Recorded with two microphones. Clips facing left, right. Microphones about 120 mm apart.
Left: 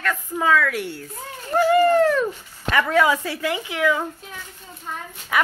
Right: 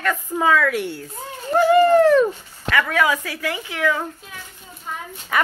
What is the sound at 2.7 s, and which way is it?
Speech, 20° left (ahead or behind).